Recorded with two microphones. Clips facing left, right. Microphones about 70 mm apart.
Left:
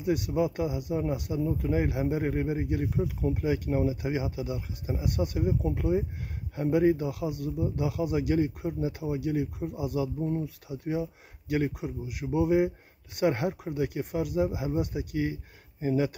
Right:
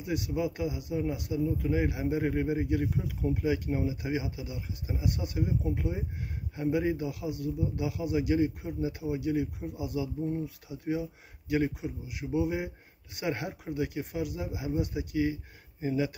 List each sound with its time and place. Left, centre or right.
0.0 s a man's voice: left